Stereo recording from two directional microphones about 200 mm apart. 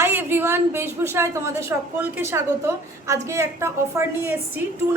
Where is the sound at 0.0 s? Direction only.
10° right (ahead or behind).